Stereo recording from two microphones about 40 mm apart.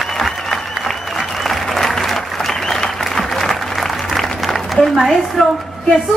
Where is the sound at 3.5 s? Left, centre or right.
Centre.